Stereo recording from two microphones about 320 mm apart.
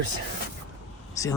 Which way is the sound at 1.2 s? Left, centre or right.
Centre.